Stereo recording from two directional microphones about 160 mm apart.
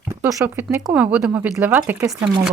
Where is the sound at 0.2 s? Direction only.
15° right (ahead or behind).